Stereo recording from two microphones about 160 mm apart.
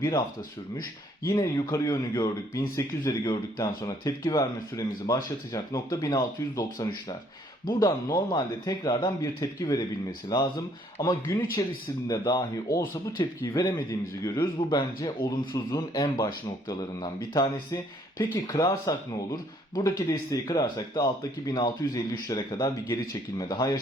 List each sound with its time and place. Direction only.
1.3 s speech: 25° left (ahead or behind)